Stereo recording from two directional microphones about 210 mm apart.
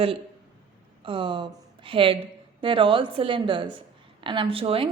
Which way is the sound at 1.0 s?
25° right (ahead or behind).